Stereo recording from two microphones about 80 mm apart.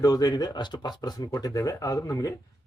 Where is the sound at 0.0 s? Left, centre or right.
Left.